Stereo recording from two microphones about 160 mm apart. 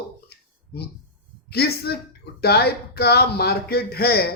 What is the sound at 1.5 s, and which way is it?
Speech, 85° left.